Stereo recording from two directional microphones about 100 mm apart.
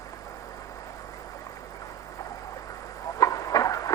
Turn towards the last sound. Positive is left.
turn(degrees=35)  # may be behind; listen again after turning